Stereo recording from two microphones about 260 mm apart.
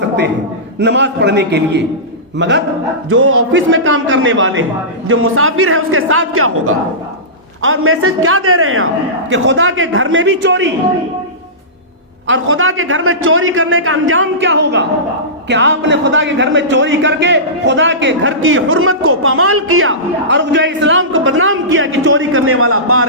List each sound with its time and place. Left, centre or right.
0.8 s a man's voice: right
3.1 s speech: right
12.3 s speech: right